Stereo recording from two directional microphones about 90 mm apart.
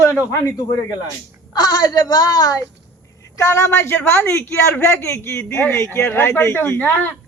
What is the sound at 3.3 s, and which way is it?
Speech, 30° left (ahead or behind).